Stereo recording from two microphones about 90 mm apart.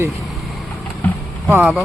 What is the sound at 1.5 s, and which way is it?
Speech, 20° right (ahead or behind).